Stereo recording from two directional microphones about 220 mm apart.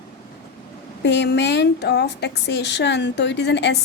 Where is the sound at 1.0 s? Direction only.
50° left (ahead or behind).